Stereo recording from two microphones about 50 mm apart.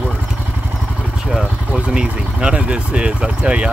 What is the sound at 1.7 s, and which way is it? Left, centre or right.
Speech, centre.